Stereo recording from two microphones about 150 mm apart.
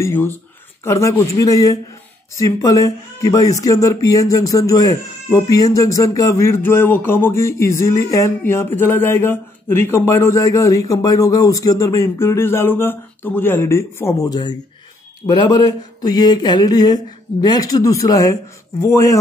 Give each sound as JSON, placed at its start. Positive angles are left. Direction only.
{"t": 0.0, "sound": "speech", "side_deg": 15}